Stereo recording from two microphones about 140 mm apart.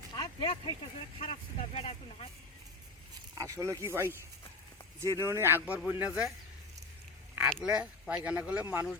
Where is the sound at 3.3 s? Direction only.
25° right (ahead or behind).